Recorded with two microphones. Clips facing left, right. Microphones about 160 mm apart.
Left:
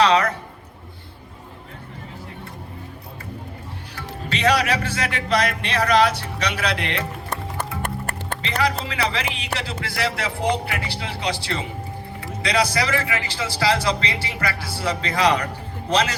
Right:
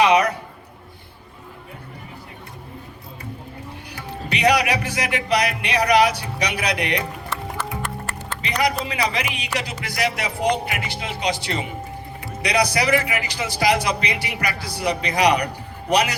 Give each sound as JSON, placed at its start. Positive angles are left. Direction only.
{"t": 0.0, "sound": "a sound", "side_deg": -15}
{"t": 3.9, "sound": "a man's voice", "side_deg": -15}
{"t": 7.6, "sound": "music", "side_deg": 55}
{"t": 8.4, "sound": "a man's voice", "side_deg": -15}